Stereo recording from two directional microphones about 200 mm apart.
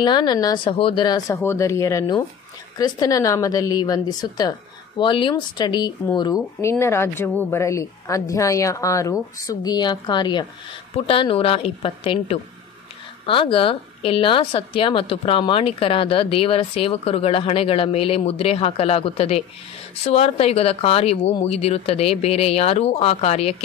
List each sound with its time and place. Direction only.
0.0 s a woman's voice: 20° left (ahead or behind)